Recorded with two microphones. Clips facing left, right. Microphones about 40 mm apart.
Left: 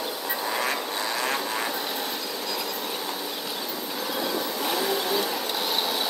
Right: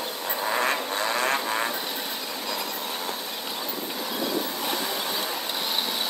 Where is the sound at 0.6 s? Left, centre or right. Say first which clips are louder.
Right 2 dB; right.